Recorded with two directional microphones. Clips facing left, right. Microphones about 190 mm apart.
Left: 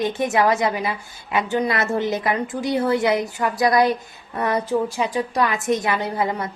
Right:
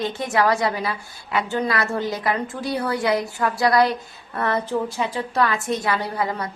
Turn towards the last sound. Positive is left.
turn(degrees=20)  # may be behind; listen again after turning